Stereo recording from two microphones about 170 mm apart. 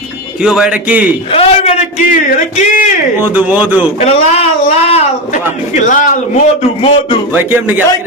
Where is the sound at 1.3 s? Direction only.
35° left (ahead or behind); by 2.8 s 55° left (ahead or behind).